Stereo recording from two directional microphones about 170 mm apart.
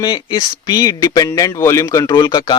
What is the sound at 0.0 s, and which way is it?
Speech, 25° left (ahead or behind).